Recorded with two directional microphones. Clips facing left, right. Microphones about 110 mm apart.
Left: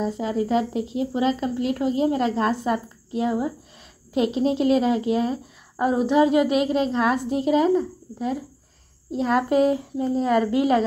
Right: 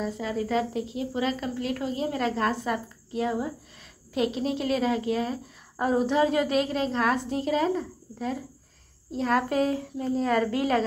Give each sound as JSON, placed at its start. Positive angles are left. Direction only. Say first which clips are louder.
{"t": 0.0, "sound": "a woman's voice", "louder": "left 5 dB", "side_deg": 25}